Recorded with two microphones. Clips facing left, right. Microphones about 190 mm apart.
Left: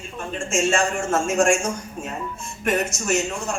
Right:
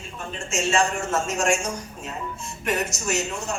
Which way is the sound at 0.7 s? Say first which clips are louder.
Left 1 dB; 50° left (ahead or behind).